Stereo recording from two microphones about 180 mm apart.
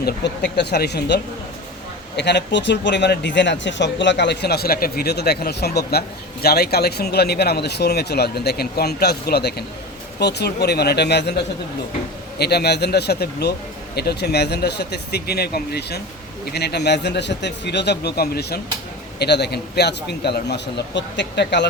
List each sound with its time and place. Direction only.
0.0 s a man's voice: 70° left (ahead or behind)
12.4 s a man's voice: 65° left (ahead or behind)